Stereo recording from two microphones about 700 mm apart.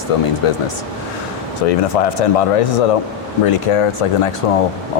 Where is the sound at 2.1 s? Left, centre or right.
Left.